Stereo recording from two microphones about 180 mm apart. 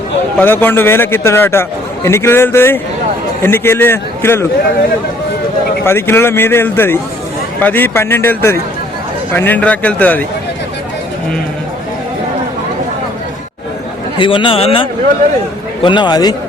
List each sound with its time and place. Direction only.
0.3 s a man's voice: 10° left (ahead or behind)
5.8 s a man's voice: 15° left (ahead or behind)
14.2 s a man's voice: 30° left (ahead or behind)